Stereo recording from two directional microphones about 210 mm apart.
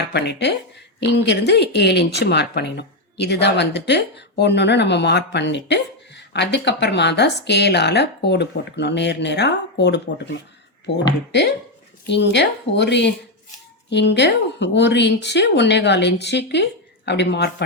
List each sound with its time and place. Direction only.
0.1 s speech: 50° left (ahead or behind)